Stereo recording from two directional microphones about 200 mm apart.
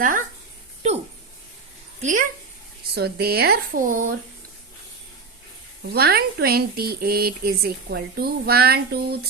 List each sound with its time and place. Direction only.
0.8 s a sound: 30° right (ahead or behind)
2.0 s speech: 40° right (ahead or behind)
2.9 s a woman's voice: 55° right (ahead or behind)
5.9 s a woman's voice: 50° right (ahead or behind)